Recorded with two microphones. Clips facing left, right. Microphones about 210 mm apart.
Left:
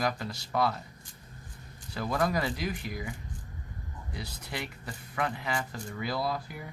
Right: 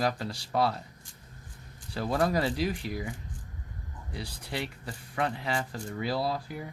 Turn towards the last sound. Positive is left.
turn(degrees=-30)  # may be behind; listen again after turning